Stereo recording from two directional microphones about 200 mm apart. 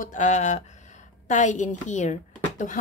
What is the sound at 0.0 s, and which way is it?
A woman's voice, 40° left (ahead or behind).